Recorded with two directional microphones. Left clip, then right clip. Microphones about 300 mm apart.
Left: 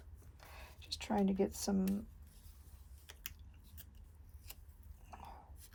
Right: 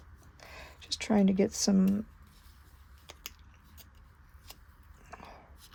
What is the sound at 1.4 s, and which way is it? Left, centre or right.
Speech, right.